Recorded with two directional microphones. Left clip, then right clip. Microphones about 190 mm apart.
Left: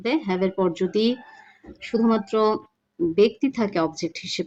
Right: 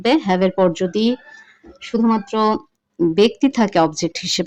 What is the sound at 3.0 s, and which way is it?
Speech, 40° right (ahead or behind).